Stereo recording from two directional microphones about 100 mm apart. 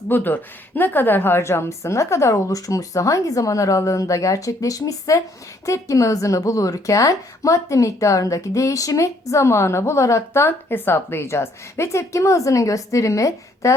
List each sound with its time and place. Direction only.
0.1 s speech: 20° left (ahead or behind)